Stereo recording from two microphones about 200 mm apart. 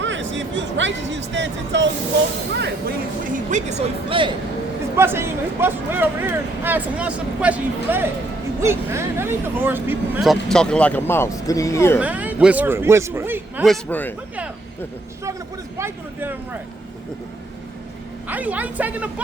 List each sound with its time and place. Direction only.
0.0 s speech: 65° right (ahead or behind)
3.3 s speech: 35° right (ahead or behind)
4.9 s speech: 10° right (ahead or behind); by 11.9 s 15° left (ahead or behind)
11.9 s speech: 5° right (ahead or behind)
13.7 s speech: 10° left (ahead or behind)
15.8 s speech: 10° right (ahead or behind)
18.3 s speech: 10° right (ahead or behind)